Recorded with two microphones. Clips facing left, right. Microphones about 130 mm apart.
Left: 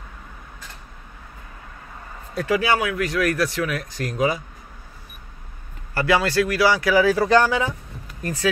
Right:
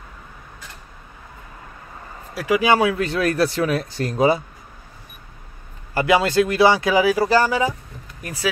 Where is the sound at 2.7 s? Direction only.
30° right (ahead or behind).